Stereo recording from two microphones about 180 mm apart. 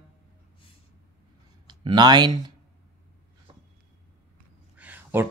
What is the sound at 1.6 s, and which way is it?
Speech, 25° right (ahead or behind).